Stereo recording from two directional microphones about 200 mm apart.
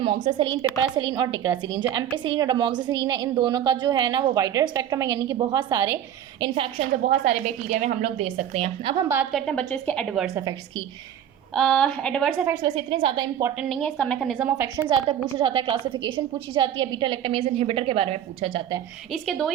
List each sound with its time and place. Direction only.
0.0 s a woman's voice: 30° right (ahead or behind)
6.5 s a woman's voice: 30° right (ahead or behind)
9.3 s a woman's voice: 5° left (ahead or behind)
11.5 s a woman's voice: 5° left (ahead or behind)
12.5 s a woman's voice: 20° right (ahead or behind)
13.6 s a woman's voice: centre (ahead or behind)
14.8 s a woman's voice: 20° right (ahead or behind)
19.1 s a woman's voice: centre (ahead or behind)